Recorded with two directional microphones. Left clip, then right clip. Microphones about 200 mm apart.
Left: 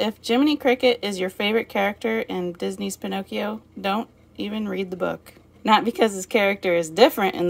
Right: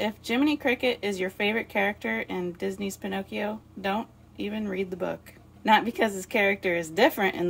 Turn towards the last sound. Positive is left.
turn(degrees=25)  # may be behind; listen again after turning